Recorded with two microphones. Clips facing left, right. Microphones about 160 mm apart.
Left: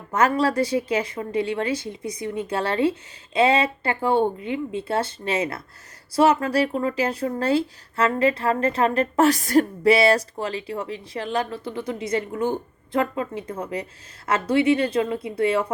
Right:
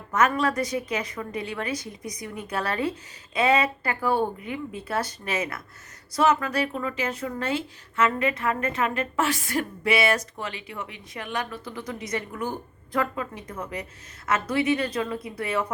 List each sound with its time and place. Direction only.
0.1 s a woman's voice: 30° left (ahead or behind)